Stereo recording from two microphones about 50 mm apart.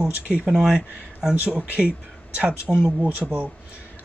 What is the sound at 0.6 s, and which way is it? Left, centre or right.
Speech, centre.